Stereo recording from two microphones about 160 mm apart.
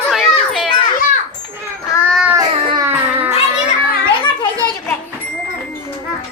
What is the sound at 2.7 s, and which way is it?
Baby cry, 15° right (ahead or behind).